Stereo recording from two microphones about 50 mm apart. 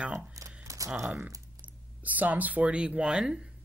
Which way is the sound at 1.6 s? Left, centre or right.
Right.